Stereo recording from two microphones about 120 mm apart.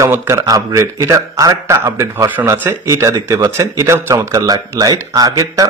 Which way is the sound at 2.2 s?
15° right (ahead or behind).